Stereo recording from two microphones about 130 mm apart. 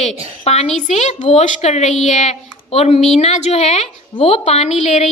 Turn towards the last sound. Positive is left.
turn(degrees=60)  # may be behind; listen again after turning